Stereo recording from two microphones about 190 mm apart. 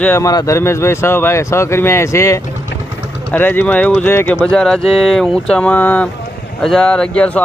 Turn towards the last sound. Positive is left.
turn(degrees=5)  # may be behind; listen again after turning